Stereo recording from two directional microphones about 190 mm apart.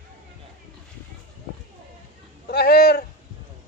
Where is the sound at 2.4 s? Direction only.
55° left (ahead or behind).